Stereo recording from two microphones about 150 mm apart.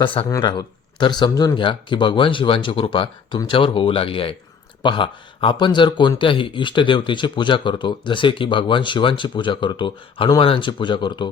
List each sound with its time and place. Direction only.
0.0 s speech: 35° left (ahead or behind)